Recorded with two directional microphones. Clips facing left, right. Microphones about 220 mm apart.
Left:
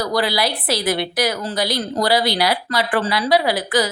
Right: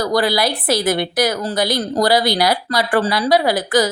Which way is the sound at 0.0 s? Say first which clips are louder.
Right 3 dB; 45° right (ahead or behind).